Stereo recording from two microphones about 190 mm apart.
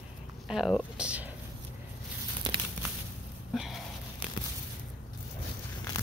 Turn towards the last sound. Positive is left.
turn(degrees=0)  # may be behind; listen again after turning